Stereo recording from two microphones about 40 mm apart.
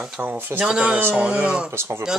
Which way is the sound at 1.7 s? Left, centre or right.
Right.